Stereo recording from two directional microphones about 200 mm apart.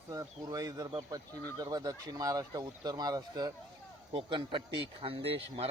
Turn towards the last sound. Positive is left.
turn(degrees=-30)  # may be behind; listen again after turning